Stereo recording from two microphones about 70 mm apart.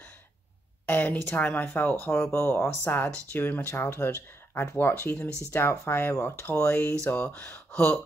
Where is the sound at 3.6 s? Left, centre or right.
Left.